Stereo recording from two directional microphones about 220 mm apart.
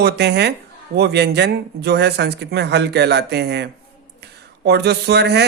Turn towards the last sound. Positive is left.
turn(degrees=-50)  # may be behind; listen again after turning